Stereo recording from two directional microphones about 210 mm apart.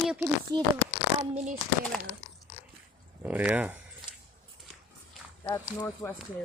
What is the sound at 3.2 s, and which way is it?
Speech, 5° right (ahead or behind).